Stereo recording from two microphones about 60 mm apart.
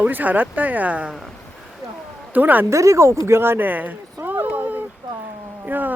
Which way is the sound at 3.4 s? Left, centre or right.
Right.